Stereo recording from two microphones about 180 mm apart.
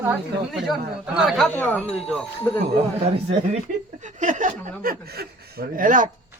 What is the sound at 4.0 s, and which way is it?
Chuckle, 45° right (ahead or behind).